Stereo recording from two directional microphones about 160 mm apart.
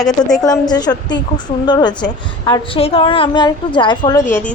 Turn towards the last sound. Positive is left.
turn(degrees=30)  # may be behind; listen again after turning